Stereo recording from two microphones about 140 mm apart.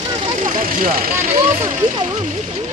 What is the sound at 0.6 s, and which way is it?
Speech, 80° right.